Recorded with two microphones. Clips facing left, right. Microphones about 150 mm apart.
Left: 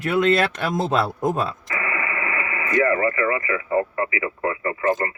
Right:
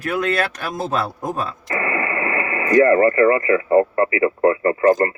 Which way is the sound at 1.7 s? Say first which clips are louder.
Right 5 dB; 45° right (ahead or behind).